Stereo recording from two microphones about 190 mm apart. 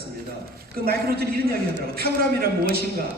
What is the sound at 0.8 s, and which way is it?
A man's voice, 55° right (ahead or behind).